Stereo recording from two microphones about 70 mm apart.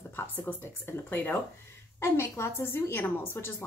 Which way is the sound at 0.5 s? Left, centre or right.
Left.